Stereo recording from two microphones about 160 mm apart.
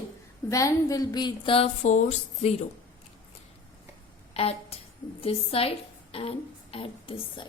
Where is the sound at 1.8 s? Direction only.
50° left (ahead or behind).